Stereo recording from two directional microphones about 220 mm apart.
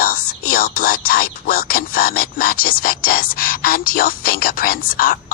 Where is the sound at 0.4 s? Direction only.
40° left (ahead or behind).